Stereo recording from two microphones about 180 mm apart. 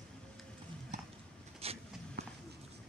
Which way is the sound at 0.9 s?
40° right (ahead or behind).